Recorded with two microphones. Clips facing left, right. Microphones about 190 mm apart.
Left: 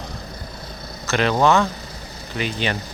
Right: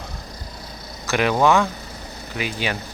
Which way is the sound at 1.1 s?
10° right (ahead or behind).